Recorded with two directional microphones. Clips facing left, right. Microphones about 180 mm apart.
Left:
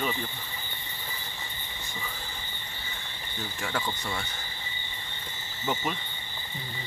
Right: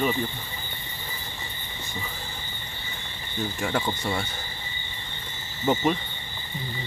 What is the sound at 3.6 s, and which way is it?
Speech, 30° right (ahead or behind).